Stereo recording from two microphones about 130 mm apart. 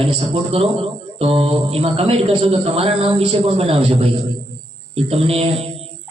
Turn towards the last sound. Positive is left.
turn(degrees=-50)  # may be behind; listen again after turning